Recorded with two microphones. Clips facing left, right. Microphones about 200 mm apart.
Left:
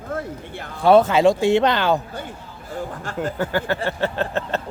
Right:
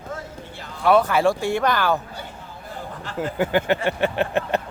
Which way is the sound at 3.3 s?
15° right (ahead or behind).